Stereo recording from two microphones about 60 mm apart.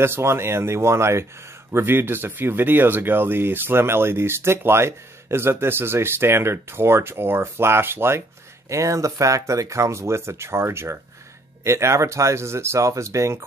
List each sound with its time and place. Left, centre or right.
0.0 s speech: right
1.7 s speech: right
8.6 s speech: right